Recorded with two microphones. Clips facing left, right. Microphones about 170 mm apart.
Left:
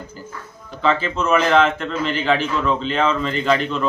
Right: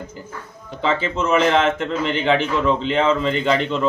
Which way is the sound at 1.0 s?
25° right (ahead or behind).